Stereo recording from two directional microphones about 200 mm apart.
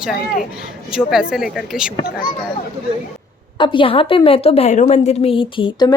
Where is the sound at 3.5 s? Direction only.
25° left (ahead or behind).